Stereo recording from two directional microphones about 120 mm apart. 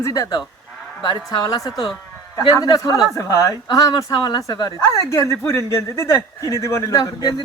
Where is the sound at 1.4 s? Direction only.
30° left (ahead or behind).